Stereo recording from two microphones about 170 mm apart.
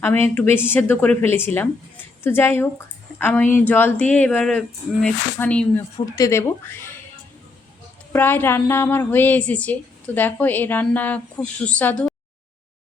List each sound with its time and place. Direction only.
0.3 s a woman's voice: 10° left (ahead or behind)
8.1 s a woman's voice: 10° left (ahead or behind)